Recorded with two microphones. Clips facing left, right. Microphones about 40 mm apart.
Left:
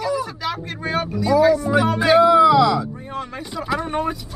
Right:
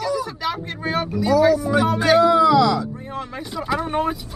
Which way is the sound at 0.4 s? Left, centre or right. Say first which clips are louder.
Right 1 dB; centre.